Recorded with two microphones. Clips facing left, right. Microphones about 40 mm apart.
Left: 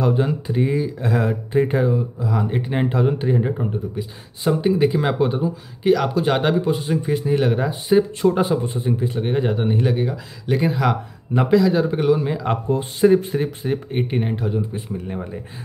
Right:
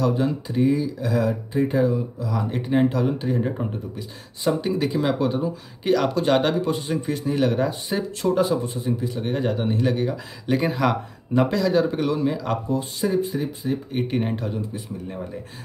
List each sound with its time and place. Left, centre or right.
0.0 s speech: left
1.9 s speech: left
5.4 s speech: centre; by 9.3 s left
9.3 s speech: centre
10.4 s a man's voice: centre
12.2 s speech: left
12.6 s speech: left
14.0 s speech: centre
14.7 s speech: left